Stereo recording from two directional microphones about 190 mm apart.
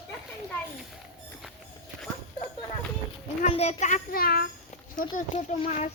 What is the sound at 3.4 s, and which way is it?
A child's voice, 35° left (ahead or behind).